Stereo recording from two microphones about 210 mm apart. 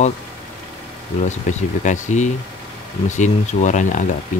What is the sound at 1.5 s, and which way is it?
Speech, 35° left (ahead or behind).